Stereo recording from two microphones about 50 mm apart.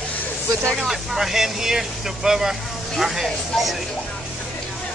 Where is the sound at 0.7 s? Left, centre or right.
Centre.